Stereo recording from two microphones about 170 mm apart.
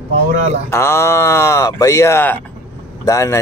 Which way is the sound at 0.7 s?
15° left (ahead or behind).